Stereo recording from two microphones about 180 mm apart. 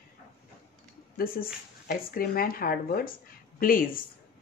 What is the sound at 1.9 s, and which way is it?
Speech, 55° left (ahead or behind).